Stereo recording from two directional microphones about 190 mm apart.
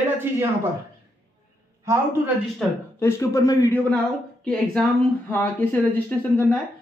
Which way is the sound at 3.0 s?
15° left (ahead or behind).